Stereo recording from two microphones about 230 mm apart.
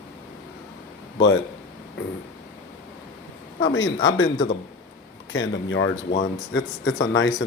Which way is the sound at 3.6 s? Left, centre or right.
Left.